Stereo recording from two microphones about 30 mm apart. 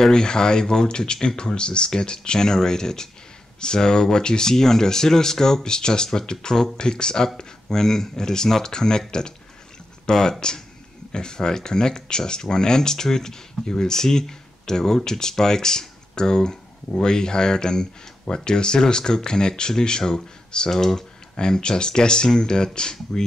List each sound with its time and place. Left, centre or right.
0.0 s speech: left
10.0 s speech: centre
21.4 s speech: left